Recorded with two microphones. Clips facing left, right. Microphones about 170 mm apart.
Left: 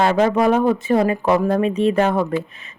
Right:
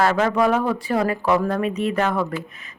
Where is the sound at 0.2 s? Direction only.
30° left (ahead or behind).